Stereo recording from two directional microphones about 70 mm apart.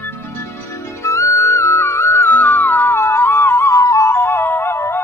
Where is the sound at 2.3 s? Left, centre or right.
Left.